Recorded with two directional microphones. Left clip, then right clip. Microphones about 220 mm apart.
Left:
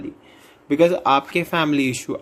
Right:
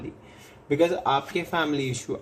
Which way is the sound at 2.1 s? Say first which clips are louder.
Left 4 dB; 50° left (ahead or behind).